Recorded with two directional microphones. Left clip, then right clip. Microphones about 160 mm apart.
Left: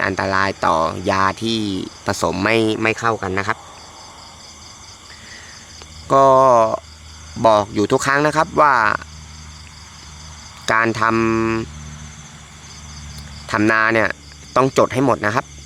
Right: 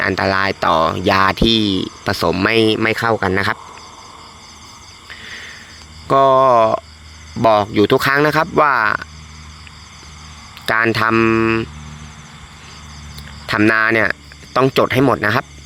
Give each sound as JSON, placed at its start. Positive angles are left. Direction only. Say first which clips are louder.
{"t": 0.0, "sound": "speech", "louder": "right 2 dB", "side_deg": -20}
{"t": 6.1, "sound": "speech", "louder": "even", "side_deg": -15}
{"t": 10.7, "sound": "speech", "louder": "right 1 dB", "side_deg": -15}
{"t": 11.1, "sound": "speech", "louder": "right 4 dB", "side_deg": -5}
{"t": 13.5, "sound": "speech", "louder": "right 2 dB", "side_deg": -15}